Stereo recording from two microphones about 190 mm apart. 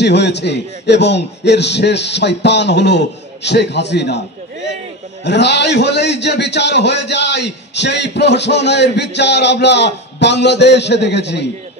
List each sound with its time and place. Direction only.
0.0 s a man's voice: 65° left (ahead or behind)
5.2 s a man's voice: 65° left (ahead or behind)